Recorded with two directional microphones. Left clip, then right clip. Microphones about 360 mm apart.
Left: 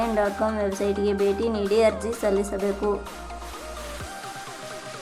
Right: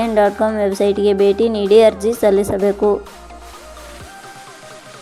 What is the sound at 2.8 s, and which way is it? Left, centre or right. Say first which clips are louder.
Speech: right 11 dB; centre.